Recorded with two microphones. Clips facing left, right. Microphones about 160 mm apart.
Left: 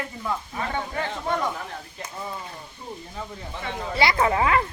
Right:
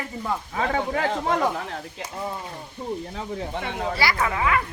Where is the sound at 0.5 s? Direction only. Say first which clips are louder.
Right 4 dB; 90° right.